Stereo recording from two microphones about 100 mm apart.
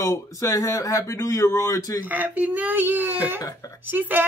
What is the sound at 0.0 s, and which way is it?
Speech, 35° left (ahead or behind).